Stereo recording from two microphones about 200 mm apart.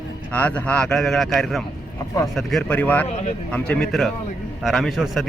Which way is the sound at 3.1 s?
35° left (ahead or behind).